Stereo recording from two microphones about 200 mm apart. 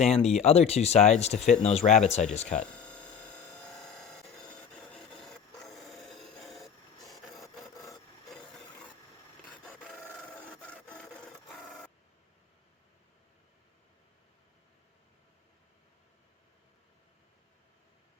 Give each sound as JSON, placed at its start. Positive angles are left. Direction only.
{"t": 0.0, "sound": "speech", "side_deg": 35}
{"t": 2.6, "sound": "hum", "side_deg": 5}
{"t": 4.9, "sound": "filing", "side_deg": 0}
{"t": 7.4, "sound": "rub", "side_deg": 15}
{"t": 10.5, "sound": "wood", "side_deg": 5}